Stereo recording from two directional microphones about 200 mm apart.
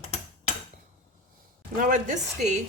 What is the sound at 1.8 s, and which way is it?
Speech, 40° right (ahead or behind).